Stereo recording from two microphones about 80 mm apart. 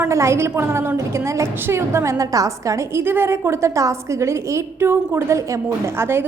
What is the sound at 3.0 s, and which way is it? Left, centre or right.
A woman's voice, right.